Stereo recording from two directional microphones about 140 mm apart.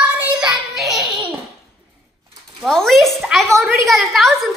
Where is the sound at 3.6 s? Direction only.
15° right (ahead or behind).